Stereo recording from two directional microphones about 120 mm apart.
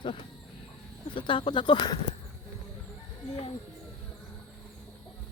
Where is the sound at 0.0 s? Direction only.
45° left (ahead or behind).